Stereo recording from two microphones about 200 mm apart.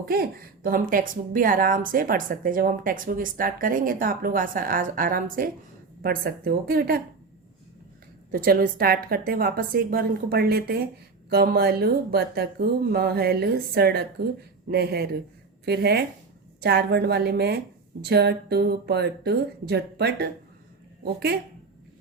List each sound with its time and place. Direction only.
0.0 s a woman's voice: 50° right (ahead or behind)
8.3 s a woman's voice: 45° right (ahead or behind)